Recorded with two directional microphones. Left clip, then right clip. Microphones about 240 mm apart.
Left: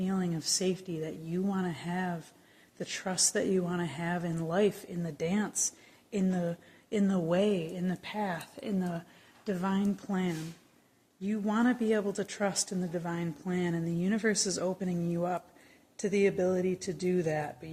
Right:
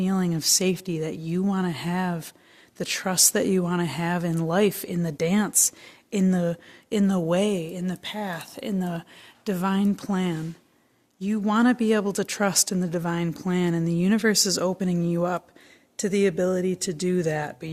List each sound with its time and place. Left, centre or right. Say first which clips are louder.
0.0 s speech: right 8 dB; right